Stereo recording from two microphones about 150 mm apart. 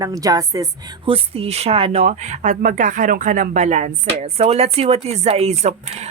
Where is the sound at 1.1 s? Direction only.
40° right (ahead or behind).